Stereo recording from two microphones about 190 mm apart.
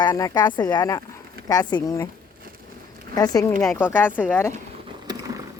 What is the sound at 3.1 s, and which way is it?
A woman's voice, 20° left (ahead or behind).